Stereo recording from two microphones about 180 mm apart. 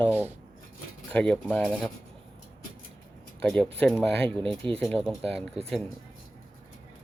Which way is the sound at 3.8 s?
5° left (ahead or behind).